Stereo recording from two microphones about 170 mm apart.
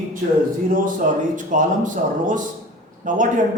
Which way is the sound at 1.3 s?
50° right (ahead or behind).